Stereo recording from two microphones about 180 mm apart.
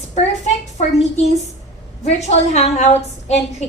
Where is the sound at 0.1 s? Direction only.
40° left (ahead or behind).